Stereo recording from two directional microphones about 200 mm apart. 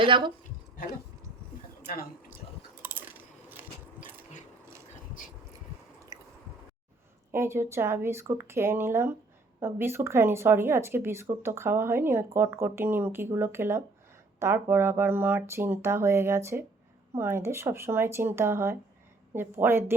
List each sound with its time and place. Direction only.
0.0 s a woman's voice: 25° right (ahead or behind)
2.8 s a sound: 10° right (ahead or behind)
6.1 s squish: 15° right (ahead or behind)
7.3 s speech: 10° right (ahead or behind)